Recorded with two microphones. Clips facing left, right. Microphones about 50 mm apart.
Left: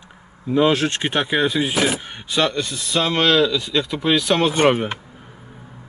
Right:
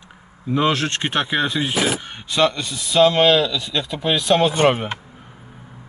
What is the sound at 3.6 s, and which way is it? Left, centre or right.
Speech, centre.